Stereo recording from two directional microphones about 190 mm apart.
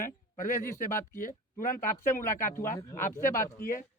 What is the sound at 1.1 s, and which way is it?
Speech, 45° left (ahead or behind).